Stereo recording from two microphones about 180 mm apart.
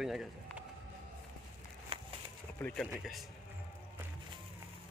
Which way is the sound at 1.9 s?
35° right (ahead or behind).